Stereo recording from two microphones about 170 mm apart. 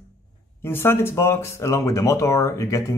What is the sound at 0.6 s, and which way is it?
Speech, 15° left (ahead or behind).